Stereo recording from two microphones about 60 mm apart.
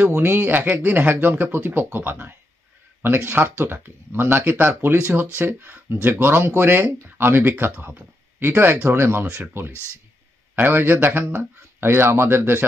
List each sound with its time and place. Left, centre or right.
0.0 s speech: right
9.7 s speech: left
10.5 s speech: right